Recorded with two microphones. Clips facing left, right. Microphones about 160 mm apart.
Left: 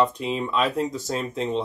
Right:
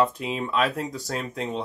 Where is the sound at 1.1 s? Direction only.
20° left (ahead or behind).